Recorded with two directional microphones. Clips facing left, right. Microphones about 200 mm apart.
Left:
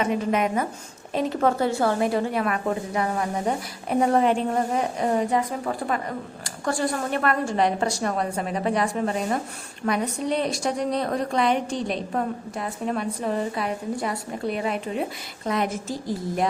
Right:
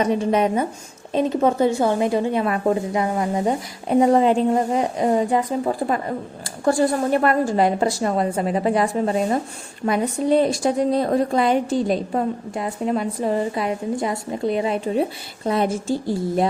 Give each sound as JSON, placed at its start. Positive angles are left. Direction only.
{"t": 0.0, "sound": "a woman's voice", "side_deg": -30}